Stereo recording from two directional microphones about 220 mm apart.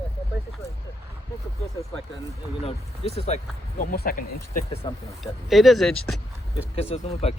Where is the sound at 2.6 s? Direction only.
25° left (ahead or behind).